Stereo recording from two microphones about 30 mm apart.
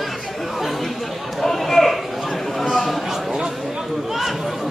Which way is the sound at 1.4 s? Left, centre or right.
Centre.